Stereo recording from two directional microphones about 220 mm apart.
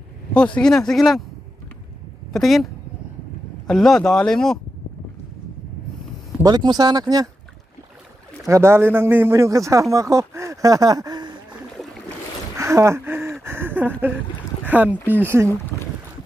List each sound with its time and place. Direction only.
0.6 s speech: 5° left (ahead or behind)
2.3 s speech: centre (ahead or behind)
6.4 s a man's voice: 20° right (ahead or behind)
8.5 s a man's voice: 10° right (ahead or behind)
12.5 s a sound: 15° right (ahead or behind)
14.6 s a man's voice: 5° right (ahead or behind)